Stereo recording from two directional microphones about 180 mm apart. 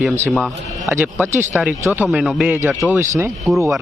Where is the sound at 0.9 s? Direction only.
15° right (ahead or behind).